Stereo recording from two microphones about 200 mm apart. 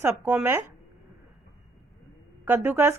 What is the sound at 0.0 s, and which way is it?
Speech, 10° right (ahead or behind).